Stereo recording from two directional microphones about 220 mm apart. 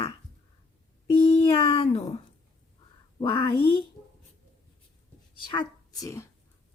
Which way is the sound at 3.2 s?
20° left (ahead or behind).